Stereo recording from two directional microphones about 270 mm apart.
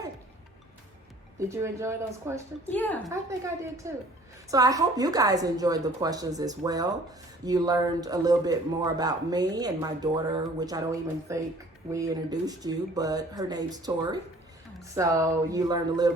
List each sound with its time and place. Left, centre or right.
1.4 s a man's voice: centre
2.6 s a woman's voice: centre
3.1 s a man's voice: centre